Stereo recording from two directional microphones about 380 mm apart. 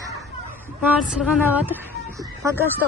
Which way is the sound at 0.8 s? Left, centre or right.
Centre.